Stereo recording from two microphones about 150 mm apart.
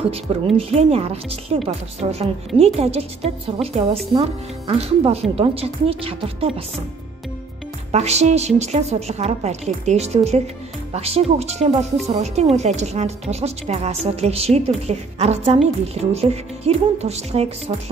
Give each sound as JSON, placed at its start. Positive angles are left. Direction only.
{"t": 0.0, "sound": "speech", "side_deg": -40}
{"t": 7.9, "sound": "a woman's voice", "side_deg": -45}